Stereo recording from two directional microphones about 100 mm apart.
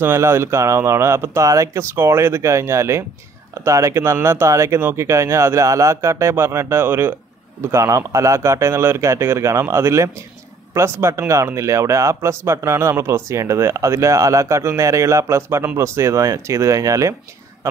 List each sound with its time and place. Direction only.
0.0 s speech: 25° right (ahead or behind)